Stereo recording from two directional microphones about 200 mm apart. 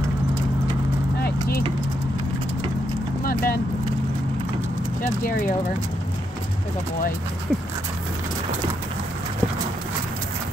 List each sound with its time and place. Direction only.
3.3 s vehicle: 45° left (ahead or behind)